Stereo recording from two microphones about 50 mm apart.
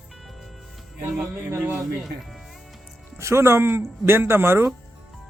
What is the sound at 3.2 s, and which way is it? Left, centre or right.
Speech, right.